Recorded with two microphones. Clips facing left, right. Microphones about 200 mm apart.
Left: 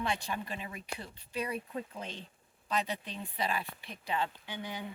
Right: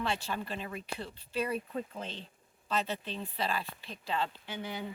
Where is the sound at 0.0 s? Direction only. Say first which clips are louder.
Right 1 dB; 15° left (ahead or behind).